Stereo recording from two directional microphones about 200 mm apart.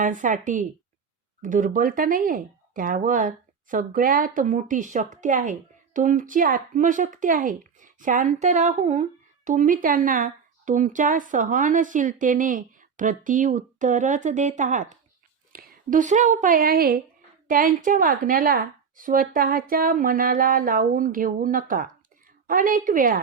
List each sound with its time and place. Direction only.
0.0 s a woman's voice: 40° right (ahead or behind)